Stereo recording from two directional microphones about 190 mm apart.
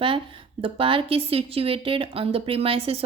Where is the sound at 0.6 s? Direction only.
30° right (ahead or behind).